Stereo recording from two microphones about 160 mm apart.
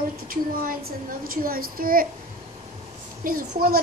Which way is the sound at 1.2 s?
65° right (ahead or behind).